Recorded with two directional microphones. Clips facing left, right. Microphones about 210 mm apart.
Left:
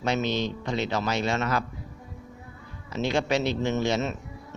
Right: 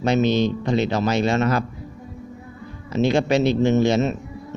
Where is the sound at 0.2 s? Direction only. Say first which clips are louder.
Right 9 dB; 25° right (ahead or behind).